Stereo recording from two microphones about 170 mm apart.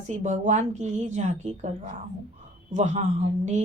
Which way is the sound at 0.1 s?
45° right (ahead or behind).